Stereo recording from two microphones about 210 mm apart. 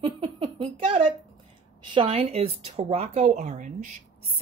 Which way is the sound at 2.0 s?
30° right (ahead or behind).